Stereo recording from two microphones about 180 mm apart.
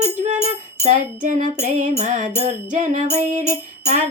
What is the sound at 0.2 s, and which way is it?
Music, 40° right (ahead or behind).